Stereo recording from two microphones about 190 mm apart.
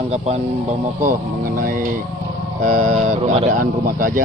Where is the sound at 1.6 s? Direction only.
45° right (ahead or behind).